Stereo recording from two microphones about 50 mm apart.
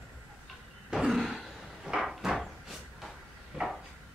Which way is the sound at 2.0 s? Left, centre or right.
Centre.